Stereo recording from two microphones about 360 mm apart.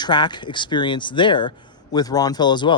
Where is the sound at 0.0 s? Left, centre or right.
Centre.